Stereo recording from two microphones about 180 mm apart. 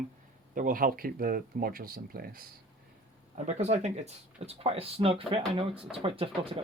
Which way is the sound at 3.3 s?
40° right (ahead or behind).